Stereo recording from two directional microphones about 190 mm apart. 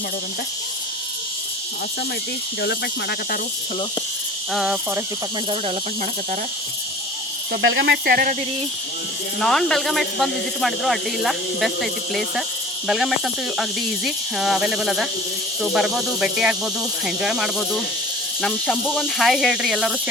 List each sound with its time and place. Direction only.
2.6 s speech: 60° left (ahead or behind)
4.5 s speech: 5° right (ahead or behind)
7.6 s speech: 75° right (ahead or behind); by 8.4 s 50° right (ahead or behind)
9.4 s speech: 5° left (ahead or behind)